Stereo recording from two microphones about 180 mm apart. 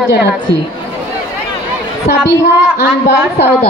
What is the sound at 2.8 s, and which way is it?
Speech, 70° left (ahead or behind).